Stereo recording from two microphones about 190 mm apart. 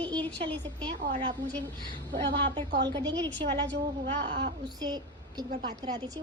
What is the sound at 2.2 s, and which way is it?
Speech, 65° right (ahead or behind).